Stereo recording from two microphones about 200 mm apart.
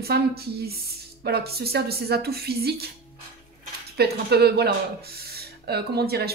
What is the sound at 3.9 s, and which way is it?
A woman's voice, 55° right (ahead or behind).